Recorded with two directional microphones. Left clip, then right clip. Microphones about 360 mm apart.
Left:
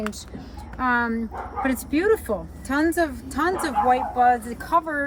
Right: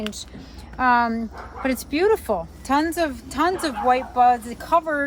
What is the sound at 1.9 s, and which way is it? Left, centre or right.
Speech, centre.